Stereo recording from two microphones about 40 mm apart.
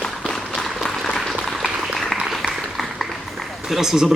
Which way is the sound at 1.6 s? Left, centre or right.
Centre.